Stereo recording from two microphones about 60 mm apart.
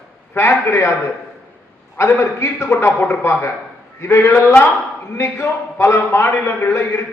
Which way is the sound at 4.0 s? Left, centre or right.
Left.